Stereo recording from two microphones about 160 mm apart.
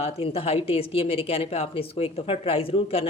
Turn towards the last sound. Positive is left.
turn(degrees=35)  # may be behind; listen again after turning